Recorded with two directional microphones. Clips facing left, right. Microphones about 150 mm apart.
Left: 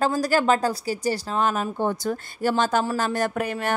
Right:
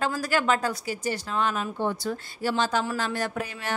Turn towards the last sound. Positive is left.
turn(degrees=55)  # may be behind; listen again after turning